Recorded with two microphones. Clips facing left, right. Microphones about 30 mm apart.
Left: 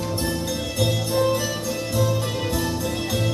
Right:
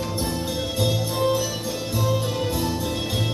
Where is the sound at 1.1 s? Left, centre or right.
Left.